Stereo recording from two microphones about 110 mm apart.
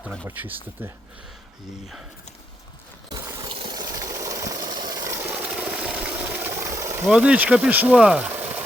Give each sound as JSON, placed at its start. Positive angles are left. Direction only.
{"t": 0.3, "sound": "speech", "side_deg": -15}
{"t": 3.4, "sound": "a sound", "side_deg": -45}
{"t": 3.8, "sound": "engine", "side_deg": -35}
{"t": 5.1, "sound": "vehicle", "side_deg": -15}
{"t": 6.6, "sound": "a sound", "side_deg": -30}
{"t": 7.1, "sound": "speech", "side_deg": -10}